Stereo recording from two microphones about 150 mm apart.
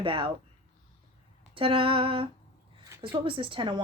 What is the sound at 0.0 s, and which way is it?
Speech, 35° right (ahead or behind).